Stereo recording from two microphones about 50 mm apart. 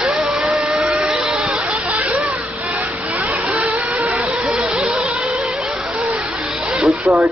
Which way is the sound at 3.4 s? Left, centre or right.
Right.